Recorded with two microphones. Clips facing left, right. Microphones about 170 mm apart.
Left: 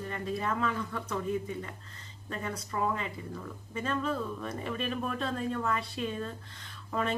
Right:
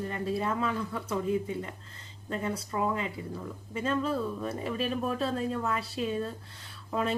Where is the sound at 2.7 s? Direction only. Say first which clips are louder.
Even; 5° right (ahead or behind).